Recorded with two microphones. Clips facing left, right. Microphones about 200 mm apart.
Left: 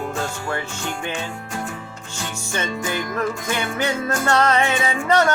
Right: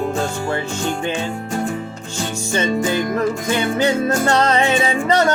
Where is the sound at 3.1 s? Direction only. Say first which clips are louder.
Right 5 dB; 20° right (ahead or behind).